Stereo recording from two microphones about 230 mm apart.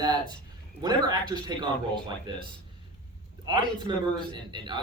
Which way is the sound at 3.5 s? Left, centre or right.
Centre.